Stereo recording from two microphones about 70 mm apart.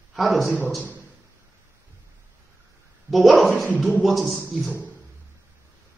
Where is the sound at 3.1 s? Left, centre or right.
Centre.